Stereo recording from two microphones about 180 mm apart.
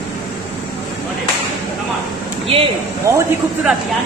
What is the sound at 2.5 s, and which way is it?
Speech, 30° right (ahead or behind).